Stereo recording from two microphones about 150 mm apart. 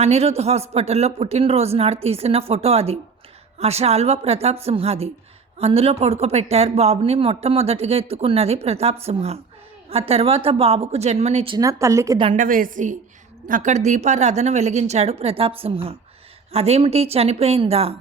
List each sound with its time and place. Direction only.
0.0 s speech: 45° right (ahead or behind)
11.5 s speech: 20° right (ahead or behind)
12.3 s a woman's voice: 60° right (ahead or behind); by 17.9 s 40° right (ahead or behind)